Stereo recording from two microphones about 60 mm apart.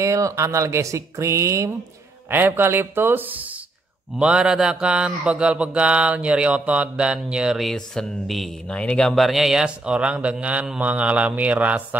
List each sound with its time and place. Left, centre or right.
0.0 s speech: right
2.3 s speech: right
4.2 s mantra: centre
7.6 s a sound: centre
8.6 s speech: centre
9.1 s a sound: centre
9.8 s mantra: centre
10.8 s speech: right